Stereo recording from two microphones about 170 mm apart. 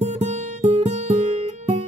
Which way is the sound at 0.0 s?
40° right (ahead or behind).